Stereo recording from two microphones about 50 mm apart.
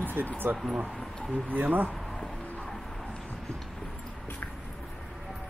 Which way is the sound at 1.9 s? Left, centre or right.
Centre.